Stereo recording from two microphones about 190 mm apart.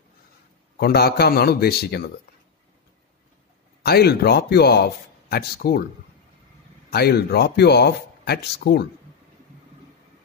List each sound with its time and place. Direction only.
0.7 s speech: 55° left (ahead or behind)
3.8 s speech: 55° left (ahead or behind)
6.9 s speech: 55° left (ahead or behind)